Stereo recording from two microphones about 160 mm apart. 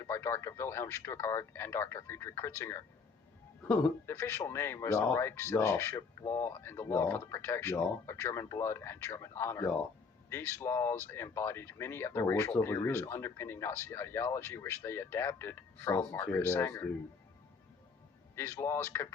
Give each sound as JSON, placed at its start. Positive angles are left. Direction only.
{"t": 0.0, "sound": "speech", "side_deg": 15}
{"t": 18.3, "sound": "speech", "side_deg": 15}